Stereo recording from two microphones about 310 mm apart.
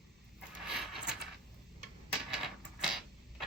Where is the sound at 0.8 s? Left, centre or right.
Centre.